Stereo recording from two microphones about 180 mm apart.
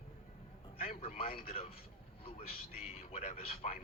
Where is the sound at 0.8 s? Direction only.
35° left (ahead or behind).